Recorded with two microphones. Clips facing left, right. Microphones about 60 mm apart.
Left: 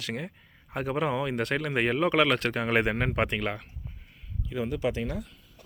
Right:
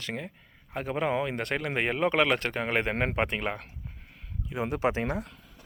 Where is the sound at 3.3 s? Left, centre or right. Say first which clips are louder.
Left 1 dB; centre.